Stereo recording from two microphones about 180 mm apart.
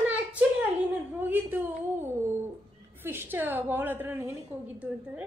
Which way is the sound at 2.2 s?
15° right (ahead or behind).